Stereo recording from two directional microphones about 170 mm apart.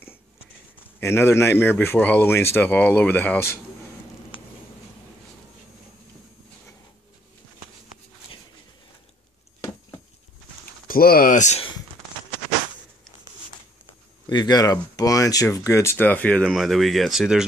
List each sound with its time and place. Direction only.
1.0 s speech: 15° left (ahead or behind)
4.3 s a sound: 30° left (ahead or behind)
10.9 s speech: 60° left (ahead or behind)
14.3 s speech: 25° left (ahead or behind); by 17.5 s 5° right (ahead or behind)